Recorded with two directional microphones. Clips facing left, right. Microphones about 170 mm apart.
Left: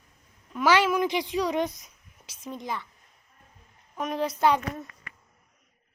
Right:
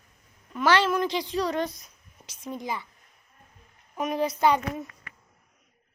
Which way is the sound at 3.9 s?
5° right (ahead or behind).